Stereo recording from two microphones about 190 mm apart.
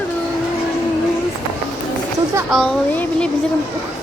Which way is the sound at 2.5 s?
5° left (ahead or behind).